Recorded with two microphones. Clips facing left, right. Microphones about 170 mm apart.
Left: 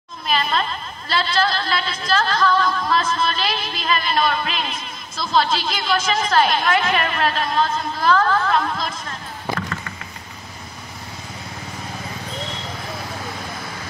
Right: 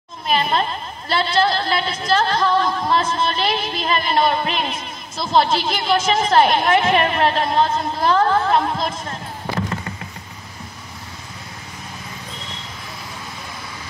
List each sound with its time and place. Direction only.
0.4 s a woman's voice: 20° right (ahead or behind)